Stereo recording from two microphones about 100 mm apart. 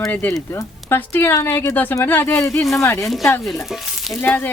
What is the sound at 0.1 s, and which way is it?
Speech, 20° left (ahead or behind).